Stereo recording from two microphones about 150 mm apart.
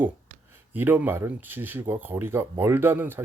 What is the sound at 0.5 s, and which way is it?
Speech, 15° right (ahead or behind).